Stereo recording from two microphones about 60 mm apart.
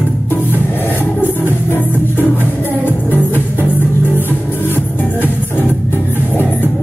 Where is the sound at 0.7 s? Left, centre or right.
Left.